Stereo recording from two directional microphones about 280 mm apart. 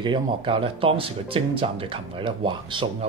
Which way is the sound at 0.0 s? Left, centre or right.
Centre.